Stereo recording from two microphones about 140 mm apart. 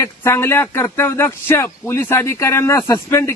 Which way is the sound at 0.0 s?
20° left (ahead or behind).